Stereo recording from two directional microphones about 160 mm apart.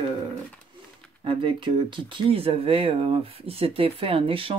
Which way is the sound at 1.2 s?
30° right (ahead or behind).